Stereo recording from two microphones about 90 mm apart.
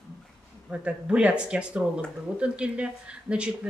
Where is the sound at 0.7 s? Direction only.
15° right (ahead or behind).